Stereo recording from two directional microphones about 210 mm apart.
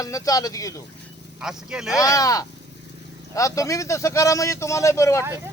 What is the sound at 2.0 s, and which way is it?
Speech, 15° left (ahead or behind).